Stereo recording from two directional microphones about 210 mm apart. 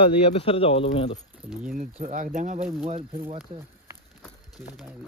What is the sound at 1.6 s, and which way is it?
Speech, 40° right (ahead or behind).